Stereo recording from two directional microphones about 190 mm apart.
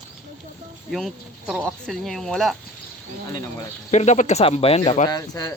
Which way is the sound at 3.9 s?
35° left (ahead or behind).